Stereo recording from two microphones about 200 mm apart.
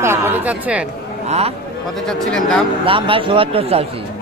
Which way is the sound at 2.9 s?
25° right (ahead or behind).